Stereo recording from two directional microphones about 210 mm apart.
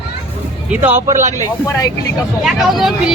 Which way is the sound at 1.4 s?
15° left (ahead or behind).